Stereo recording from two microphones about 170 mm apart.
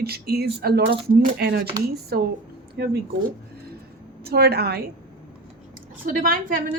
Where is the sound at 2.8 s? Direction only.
90° right.